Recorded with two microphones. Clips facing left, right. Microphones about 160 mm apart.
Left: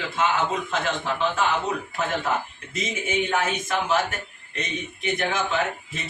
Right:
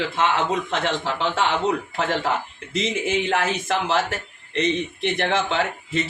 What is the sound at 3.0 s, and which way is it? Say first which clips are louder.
A woman's voice: even; 85° right.